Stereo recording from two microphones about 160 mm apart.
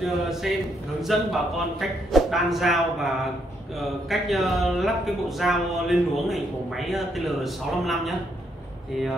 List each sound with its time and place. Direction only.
0.0 s speech: centre (ahead or behind)